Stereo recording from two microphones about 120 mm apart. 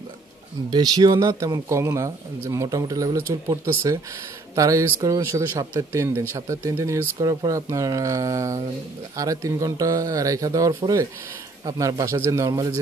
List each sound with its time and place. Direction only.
0.7 s speech: 35° right (ahead or behind)